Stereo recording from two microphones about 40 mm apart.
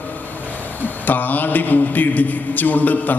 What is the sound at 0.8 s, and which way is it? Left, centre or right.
Mantra, left.